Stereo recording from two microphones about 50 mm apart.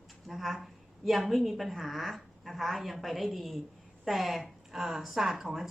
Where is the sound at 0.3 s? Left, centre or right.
Centre.